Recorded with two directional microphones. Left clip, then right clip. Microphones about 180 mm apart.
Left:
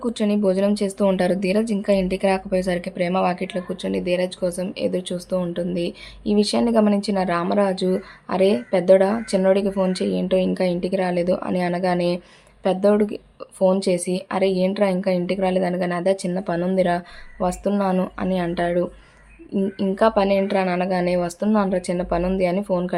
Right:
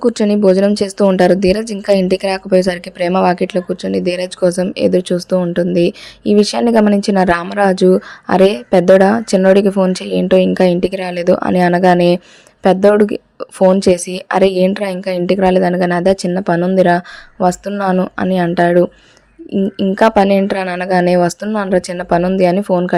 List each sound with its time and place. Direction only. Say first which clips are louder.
0.0 s a woman's voice: right 10 dB; 40° right (ahead or behind)
20.0 s speech: right 7 dB; 45° right (ahead or behind)